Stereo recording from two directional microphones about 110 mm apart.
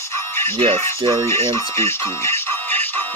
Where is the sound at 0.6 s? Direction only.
55° right (ahead or behind).